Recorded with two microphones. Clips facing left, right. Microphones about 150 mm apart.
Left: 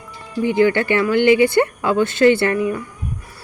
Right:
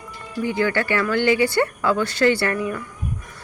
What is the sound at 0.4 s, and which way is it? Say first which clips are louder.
Speech: left 6 dB; 20° left (ahead or behind).